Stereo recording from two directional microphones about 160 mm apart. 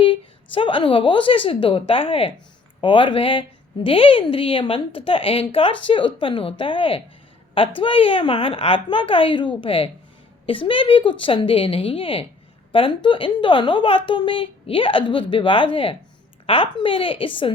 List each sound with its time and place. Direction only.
0.5 s a woman's voice: 30° left (ahead or behind)